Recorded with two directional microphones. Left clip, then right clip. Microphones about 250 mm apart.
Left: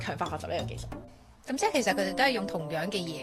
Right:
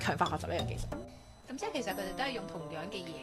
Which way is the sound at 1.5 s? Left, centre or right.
Left.